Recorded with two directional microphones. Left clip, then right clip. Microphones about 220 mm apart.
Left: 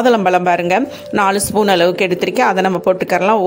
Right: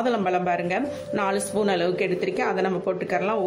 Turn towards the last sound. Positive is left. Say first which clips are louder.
# left 11 dB
turn(degrees=45)  # may be behind; listen again after turning